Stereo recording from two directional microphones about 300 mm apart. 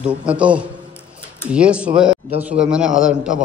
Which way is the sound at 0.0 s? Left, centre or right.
Centre.